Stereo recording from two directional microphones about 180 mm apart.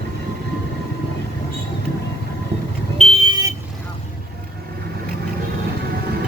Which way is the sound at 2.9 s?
35° right (ahead or behind).